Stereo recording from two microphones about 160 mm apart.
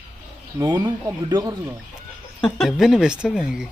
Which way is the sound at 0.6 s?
25° right (ahead or behind).